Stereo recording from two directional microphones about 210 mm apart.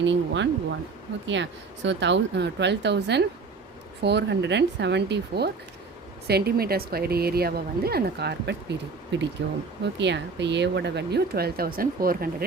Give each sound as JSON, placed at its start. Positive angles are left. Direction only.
{"t": 0.0, "sound": "speech", "side_deg": -60}